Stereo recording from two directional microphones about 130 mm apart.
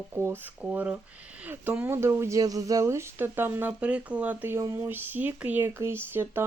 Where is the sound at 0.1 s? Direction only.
20° right (ahead or behind).